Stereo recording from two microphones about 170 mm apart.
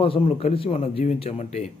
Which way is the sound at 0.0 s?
35° left (ahead or behind).